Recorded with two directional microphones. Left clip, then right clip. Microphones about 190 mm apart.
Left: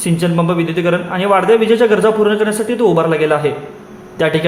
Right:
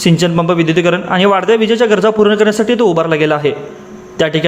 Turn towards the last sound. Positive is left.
turn(degrees=-20)  # may be behind; listen again after turning